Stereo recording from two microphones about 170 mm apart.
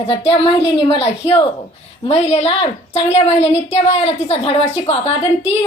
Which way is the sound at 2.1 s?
40° left (ahead or behind).